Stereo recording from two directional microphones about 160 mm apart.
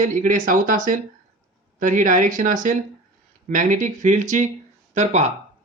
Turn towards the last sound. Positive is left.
turn(degrees=-45)  # may be behind; listen again after turning